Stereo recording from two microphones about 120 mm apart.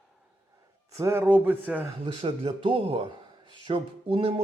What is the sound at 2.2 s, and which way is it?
Speech, 55° right (ahead or behind).